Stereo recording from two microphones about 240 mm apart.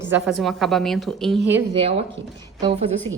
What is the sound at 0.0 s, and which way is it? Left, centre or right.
Speech, centre.